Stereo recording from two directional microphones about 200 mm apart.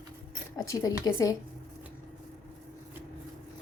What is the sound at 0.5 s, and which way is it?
Speech, 15° left (ahead or behind).